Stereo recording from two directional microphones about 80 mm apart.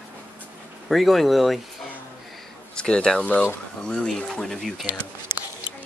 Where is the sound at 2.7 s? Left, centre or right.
Centre.